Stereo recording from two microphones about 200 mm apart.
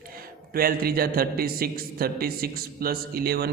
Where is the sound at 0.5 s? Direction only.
45° right (ahead or behind).